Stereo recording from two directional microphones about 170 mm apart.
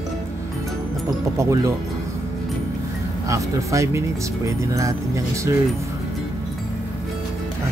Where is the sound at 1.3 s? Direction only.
15° right (ahead or behind).